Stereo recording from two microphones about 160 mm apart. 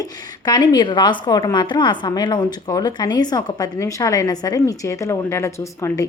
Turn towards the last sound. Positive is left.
turn(degrees=15)  # may be behind; listen again after turning